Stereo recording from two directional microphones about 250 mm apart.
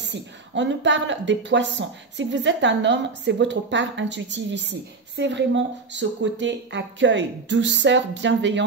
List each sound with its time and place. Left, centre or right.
0.0 s a woman's voice: right